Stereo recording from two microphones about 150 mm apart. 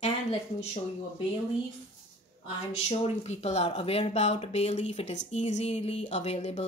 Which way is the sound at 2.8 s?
45° left (ahead or behind).